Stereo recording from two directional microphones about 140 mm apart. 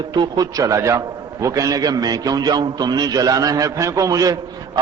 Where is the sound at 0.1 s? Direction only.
30° right (ahead or behind).